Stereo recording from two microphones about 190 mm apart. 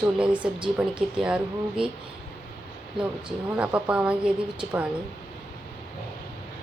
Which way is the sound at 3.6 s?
5° right (ahead or behind).